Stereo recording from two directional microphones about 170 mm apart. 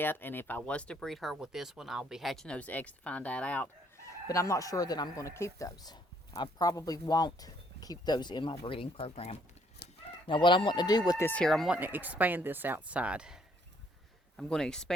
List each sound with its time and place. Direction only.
0.0 s speech: 10° left (ahead or behind)
4.3 s speech: 20° left (ahead or behind); by 9.4 s 35° left (ahead or behind)
9.8 s fowl: 70° left (ahead or behind)
10.2 s speech: 30° left (ahead or behind)
11.3 s speech: 5° left (ahead or behind)
11.8 s speech: 10° right (ahead or behind)